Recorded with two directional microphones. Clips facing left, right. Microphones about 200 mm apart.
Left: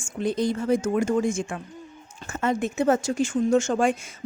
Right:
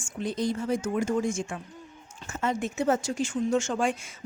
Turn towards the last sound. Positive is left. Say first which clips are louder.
# left 5 dB
turn(degrees=45)  # may be behind; listen again after turning